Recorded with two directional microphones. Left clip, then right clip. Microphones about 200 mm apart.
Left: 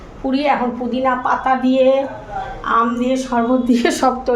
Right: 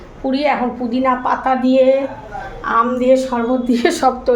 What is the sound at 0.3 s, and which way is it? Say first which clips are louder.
A woman's voice: even; 5° right (ahead or behind).